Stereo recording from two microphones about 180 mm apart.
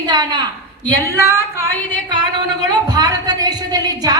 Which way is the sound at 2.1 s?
25° right (ahead or behind).